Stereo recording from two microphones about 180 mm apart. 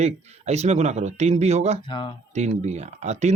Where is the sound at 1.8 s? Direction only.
25° left (ahead or behind).